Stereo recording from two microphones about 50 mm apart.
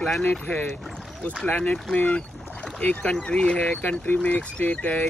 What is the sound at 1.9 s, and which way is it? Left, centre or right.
Boat, left.